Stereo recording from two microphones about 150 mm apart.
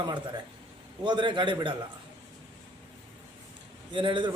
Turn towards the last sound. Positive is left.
turn(degrees=-35)  # may be behind; listen again after turning